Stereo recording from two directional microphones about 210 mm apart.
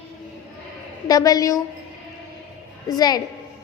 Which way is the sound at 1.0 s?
15° left (ahead or behind).